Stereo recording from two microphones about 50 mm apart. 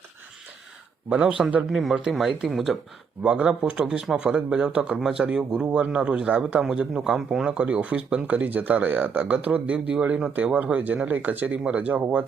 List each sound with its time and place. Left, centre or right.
1.1 s speech: centre
1.7 s speech: centre
3.2 s speech: right